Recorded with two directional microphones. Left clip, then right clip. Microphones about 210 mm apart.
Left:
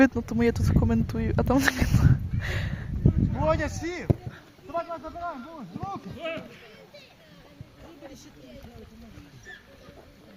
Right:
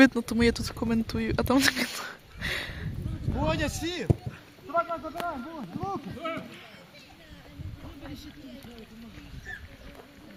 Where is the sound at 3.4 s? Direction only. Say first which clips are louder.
Left 3 dB; 50° right (ahead or behind).